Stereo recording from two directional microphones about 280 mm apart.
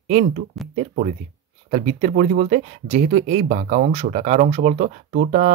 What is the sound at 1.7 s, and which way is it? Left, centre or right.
Speech, right.